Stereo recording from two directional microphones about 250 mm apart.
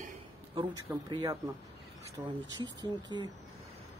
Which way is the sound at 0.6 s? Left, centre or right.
Centre.